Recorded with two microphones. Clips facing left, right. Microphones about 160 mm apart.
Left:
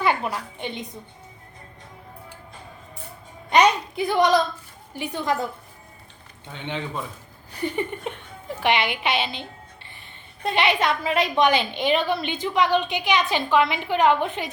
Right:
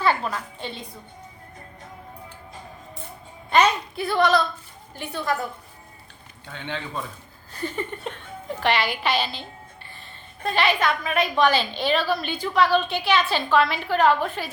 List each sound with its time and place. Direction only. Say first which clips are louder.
0.0 s a woman's voice: even; 15° left (ahead or behind)
3.5 s a woman's voice: left 2 dB; 15° left (ahead or behind)
6.5 s a woman's voice: left 2 dB; 20° left (ahead or behind)